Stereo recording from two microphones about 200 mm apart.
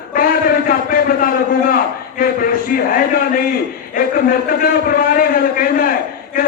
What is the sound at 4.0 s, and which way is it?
A man's voice, 45° left (ahead or behind).